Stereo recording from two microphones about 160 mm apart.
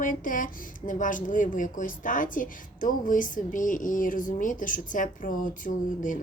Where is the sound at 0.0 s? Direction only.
55° left (ahead or behind).